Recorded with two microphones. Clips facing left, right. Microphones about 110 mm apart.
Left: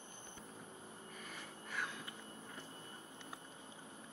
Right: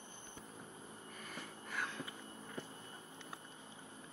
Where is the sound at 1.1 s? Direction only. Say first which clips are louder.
Right 3 dB; centre (ahead or behind).